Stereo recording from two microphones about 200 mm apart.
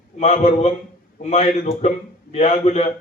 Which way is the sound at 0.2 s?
35° left (ahead or behind).